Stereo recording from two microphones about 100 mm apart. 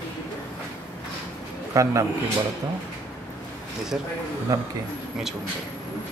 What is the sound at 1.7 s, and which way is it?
Speech, 35° right (ahead or behind).